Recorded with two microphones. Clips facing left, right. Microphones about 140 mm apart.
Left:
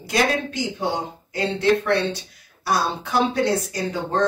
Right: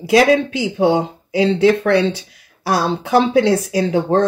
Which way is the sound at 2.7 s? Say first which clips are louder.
Right 6 dB; 75° right (ahead or behind).